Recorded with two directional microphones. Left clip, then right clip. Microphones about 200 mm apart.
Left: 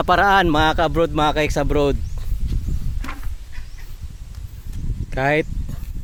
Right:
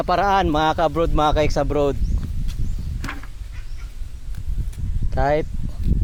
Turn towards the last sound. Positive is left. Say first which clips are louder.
# left 1 dB
turn(degrees=30)  # may be behind; listen again after turning